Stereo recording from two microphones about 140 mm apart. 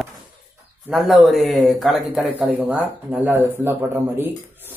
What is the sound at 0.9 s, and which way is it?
A man's voice, centre (ahead or behind).